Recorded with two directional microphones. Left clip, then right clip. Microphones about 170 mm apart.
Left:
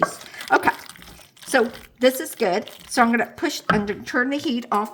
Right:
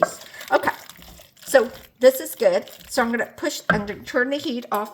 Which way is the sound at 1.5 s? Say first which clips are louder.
Right 2 dB; 50° left (ahead or behind).